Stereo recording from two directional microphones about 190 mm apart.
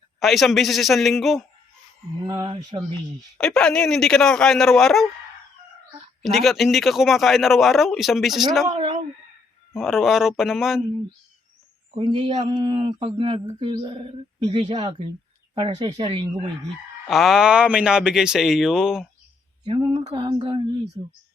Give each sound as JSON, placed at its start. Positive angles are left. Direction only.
{"t": 0.2, "sound": "a man's voice", "side_deg": 0}
{"t": 2.2, "sound": "speech", "side_deg": -20}
{"t": 3.3, "sound": "a man's voice", "side_deg": 5}
{"t": 6.2, "sound": "a man's voice", "side_deg": 0}
{"t": 8.6, "sound": "speech", "side_deg": -30}
{"t": 9.7, "sound": "a man's voice", "side_deg": 0}
{"t": 12.0, "sound": "speech", "side_deg": -25}
{"t": 17.1, "sound": "a man's voice", "side_deg": 0}
{"t": 20.1, "sound": "speech", "side_deg": -25}